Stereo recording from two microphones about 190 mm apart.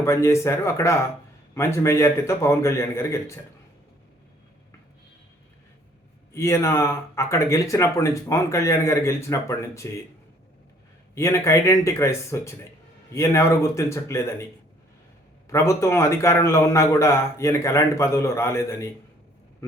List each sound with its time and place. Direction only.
0.0 s speech: 15° left (ahead or behind)
6.3 s speech: 15° left (ahead or behind)
11.1 s speech: 15° left (ahead or behind)
15.4 s speech: 15° left (ahead or behind)